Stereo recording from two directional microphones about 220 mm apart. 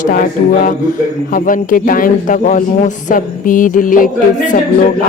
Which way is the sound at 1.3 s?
40° left (ahead or behind).